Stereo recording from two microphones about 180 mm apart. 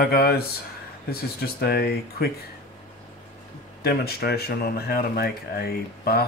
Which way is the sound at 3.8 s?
60° left (ahead or behind).